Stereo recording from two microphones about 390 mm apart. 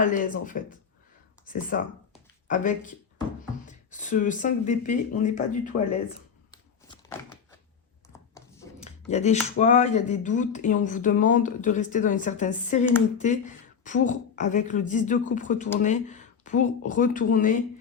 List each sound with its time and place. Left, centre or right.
0.0 s speech: left
6.8 s door: centre
8.1 s speech: centre